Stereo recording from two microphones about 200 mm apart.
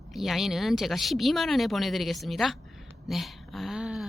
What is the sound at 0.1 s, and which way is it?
Speech, centre (ahead or behind).